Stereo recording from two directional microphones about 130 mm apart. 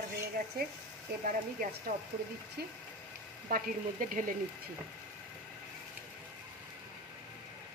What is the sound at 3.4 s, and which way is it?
Speech, 90° right.